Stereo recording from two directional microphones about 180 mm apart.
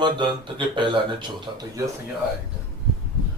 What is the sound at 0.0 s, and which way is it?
Speech, 25° right (ahead or behind).